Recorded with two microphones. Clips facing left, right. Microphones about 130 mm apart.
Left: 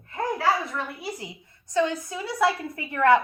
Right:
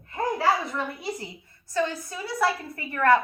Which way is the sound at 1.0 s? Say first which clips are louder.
Right 1 dB; 15° left (ahead or behind).